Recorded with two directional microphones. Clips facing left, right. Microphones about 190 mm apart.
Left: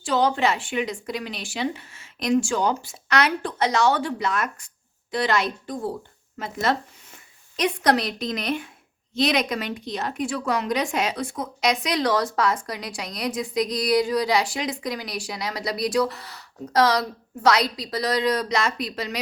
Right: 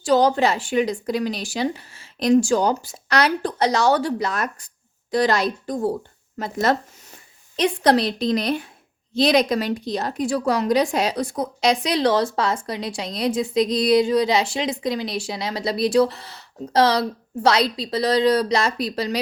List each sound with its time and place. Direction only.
0.0 s speech: 40° right (ahead or behind)
7.5 s a woman's voice: 30° right (ahead or behind)